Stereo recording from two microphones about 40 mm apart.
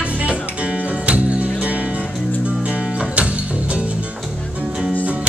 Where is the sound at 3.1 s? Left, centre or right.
Right.